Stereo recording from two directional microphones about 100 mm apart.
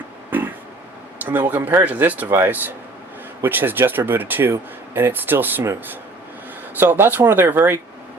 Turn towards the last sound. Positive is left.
turn(degrees=-20)  # may be behind; listen again after turning